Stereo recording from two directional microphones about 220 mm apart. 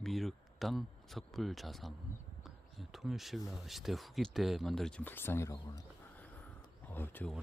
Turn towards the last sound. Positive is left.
turn(degrees=5)  # may be behind; listen again after turning